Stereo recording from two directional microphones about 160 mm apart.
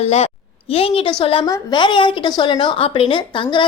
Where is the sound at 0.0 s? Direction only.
40° left (ahead or behind).